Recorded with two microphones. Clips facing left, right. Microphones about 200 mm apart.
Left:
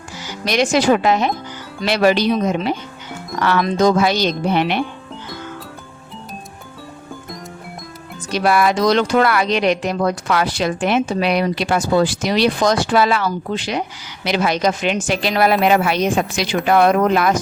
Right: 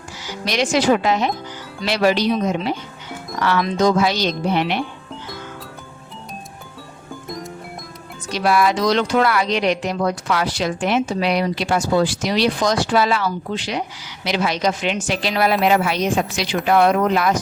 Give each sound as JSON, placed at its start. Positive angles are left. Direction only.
{"t": 0.4, "sound": "speech", "side_deg": 50}
{"t": 8.3, "sound": "speech", "side_deg": 55}